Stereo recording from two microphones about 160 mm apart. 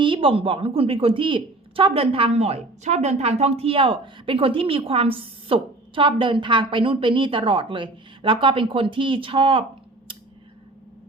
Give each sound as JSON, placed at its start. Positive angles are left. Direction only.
{"t": 0.0, "sound": "a woman's voice", "side_deg": -35}